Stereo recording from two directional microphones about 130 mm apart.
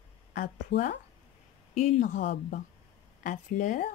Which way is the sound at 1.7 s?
60° left (ahead or behind).